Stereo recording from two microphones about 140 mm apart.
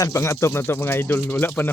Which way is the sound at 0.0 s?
20° left (ahead or behind).